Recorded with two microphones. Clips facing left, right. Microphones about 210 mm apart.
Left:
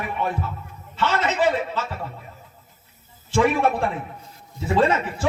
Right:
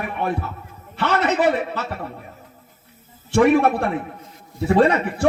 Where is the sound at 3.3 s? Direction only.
65° right (ahead or behind).